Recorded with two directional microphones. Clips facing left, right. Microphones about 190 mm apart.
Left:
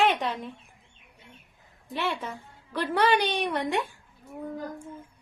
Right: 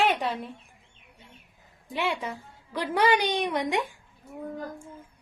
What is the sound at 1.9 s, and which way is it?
A woman's voice, 15° right (ahead or behind).